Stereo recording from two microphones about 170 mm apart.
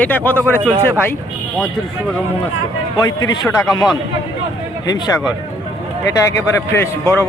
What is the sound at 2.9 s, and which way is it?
A man's voice, 25° left (ahead or behind).